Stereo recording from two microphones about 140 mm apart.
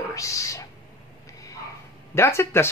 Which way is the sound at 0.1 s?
25° left (ahead or behind).